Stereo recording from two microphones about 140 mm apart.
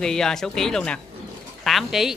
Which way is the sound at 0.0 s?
5° left (ahead or behind).